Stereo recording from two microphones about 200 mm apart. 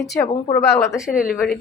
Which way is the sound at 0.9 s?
5° right (ahead or behind).